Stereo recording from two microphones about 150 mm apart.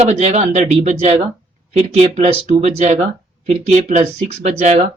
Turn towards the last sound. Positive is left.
turn(degrees=-50)  # may be behind; listen again after turning